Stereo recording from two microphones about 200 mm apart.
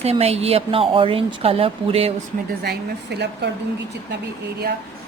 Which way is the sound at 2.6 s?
55° right (ahead or behind).